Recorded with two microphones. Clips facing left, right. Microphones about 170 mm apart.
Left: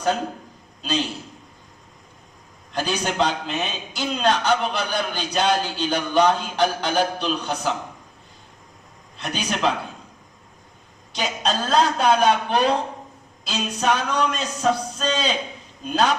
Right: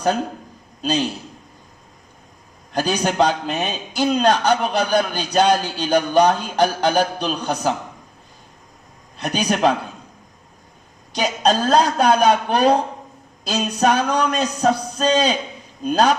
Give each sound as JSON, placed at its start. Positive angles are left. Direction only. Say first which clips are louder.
{"t": 2.7, "sound": "a man's voice", "louder": "right 4 dB", "side_deg": -40}
{"t": 9.1, "sound": "a man's voice", "louder": "right 6 dB", "side_deg": -40}
{"t": 11.1, "sound": "a man's voice", "louder": "right 6 dB", "side_deg": -40}